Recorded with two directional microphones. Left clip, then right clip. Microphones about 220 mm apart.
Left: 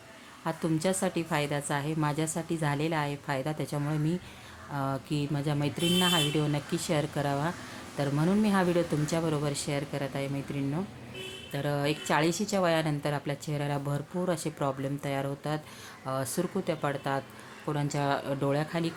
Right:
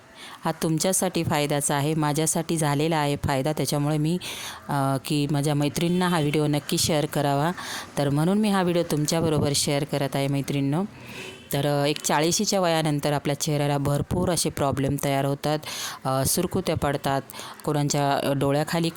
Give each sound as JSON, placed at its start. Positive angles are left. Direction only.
{"t": 0.4, "sound": "speech", "side_deg": -50}